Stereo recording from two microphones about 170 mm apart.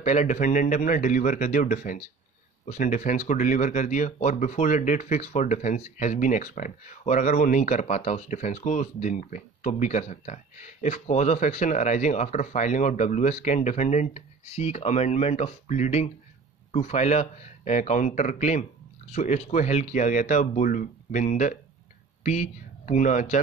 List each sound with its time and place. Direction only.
0.0 s speech: 45° left (ahead or behind)